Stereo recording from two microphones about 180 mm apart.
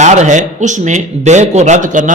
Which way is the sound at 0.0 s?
40° right (ahead or behind).